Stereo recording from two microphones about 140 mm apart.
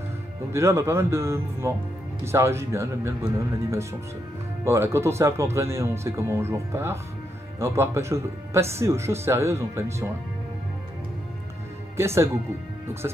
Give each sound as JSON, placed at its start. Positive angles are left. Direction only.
{"t": 0.5, "sound": "speech", "side_deg": -20}
{"t": 4.6, "sound": "speech", "side_deg": -20}
{"t": 12.0, "sound": "speech", "side_deg": -20}